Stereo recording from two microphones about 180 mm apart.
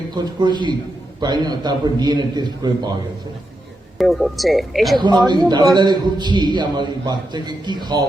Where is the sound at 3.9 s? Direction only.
Centre (ahead or behind).